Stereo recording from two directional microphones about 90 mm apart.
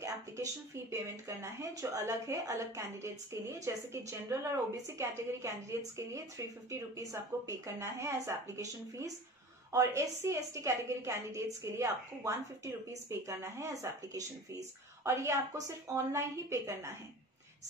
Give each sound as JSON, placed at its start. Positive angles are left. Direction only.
{"t": 0.0, "sound": "a woman's voice", "side_deg": -35}